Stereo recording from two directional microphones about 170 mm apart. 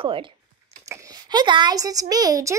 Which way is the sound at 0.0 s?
30° right (ahead or behind).